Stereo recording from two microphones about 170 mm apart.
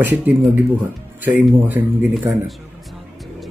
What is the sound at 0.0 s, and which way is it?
A man's voice, 10° right (ahead or behind).